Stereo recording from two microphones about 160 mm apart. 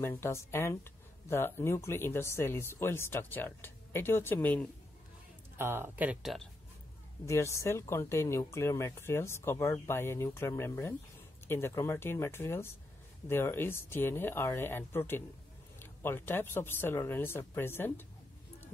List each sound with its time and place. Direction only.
0.0 s speech: 15° left (ahead or behind)
5.6 s speech: 15° right (ahead or behind)
7.2 s speech: 20° left (ahead or behind)